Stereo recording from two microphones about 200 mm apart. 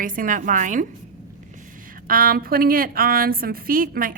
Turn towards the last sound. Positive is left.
turn(degrees=-45)  # may be behind; listen again after turning